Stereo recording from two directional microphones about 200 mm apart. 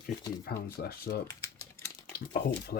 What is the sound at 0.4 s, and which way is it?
Speech, 50° left (ahead or behind).